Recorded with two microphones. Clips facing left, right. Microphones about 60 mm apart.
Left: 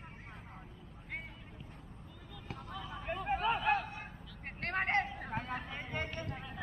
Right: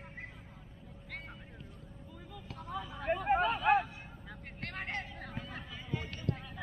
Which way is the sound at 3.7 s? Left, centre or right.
Centre.